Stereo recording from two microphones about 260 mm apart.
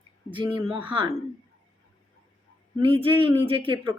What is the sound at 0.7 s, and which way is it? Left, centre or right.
Speech, centre.